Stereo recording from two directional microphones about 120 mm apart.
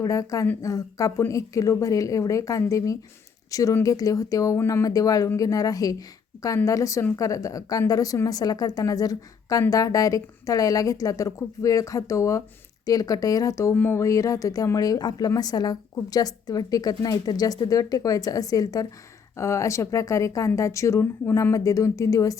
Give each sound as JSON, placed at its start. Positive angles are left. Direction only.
{"t": 0.0, "sound": "a woman's voice", "side_deg": 30}